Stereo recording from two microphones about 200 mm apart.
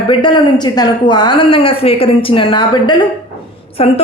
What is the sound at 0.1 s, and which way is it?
A woman's voice, 25° left (ahead or behind).